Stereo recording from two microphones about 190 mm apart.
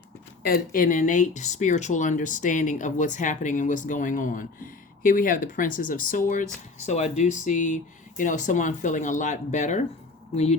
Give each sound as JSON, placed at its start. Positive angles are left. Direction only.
{"t": 0.4, "sound": "speech", "side_deg": 50}